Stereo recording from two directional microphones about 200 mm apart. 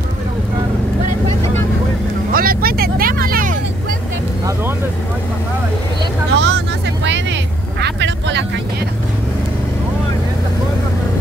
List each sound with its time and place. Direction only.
2.3 s vehicle: 45° right (ahead or behind)
6.3 s vehicle: 60° right (ahead or behind)
7.8 s vehicle: 60° right (ahead or behind)